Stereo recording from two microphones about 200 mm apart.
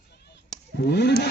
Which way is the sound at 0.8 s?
55° left (ahead or behind).